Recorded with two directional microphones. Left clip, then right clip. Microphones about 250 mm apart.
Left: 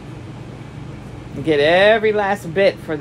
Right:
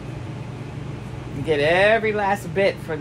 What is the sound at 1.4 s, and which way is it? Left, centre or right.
Speech, left.